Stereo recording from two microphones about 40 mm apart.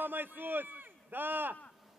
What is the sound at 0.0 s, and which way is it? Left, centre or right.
A man's voice, right.